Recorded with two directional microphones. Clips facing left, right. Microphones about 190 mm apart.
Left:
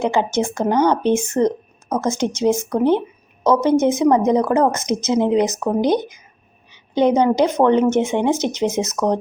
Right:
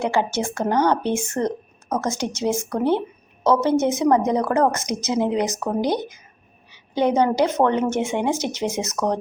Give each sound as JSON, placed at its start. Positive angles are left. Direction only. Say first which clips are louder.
{"t": 0.0, "sound": "speech", "louder": "left 3 dB", "side_deg": 20}